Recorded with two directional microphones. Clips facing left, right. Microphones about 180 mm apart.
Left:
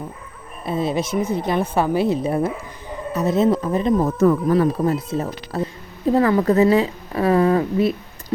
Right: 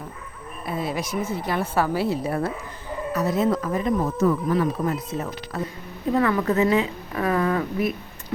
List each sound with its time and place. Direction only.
0.6 s a woman's voice: 25° left (ahead or behind)
4.0 s speech: 50° left (ahead or behind)
5.1 s a woman's voice: 30° left (ahead or behind)